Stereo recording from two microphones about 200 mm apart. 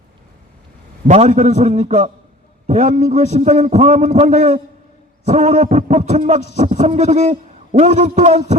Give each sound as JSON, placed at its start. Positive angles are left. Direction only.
{"t": 1.0, "sound": "a man's voice", "side_deg": -35}